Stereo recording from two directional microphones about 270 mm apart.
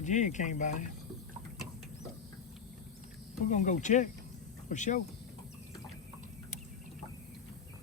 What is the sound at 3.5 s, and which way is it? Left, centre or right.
Speech, left.